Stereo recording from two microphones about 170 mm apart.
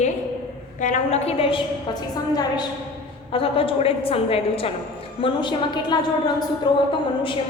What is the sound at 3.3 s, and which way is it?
A woman's voice, 35° left (ahead or behind).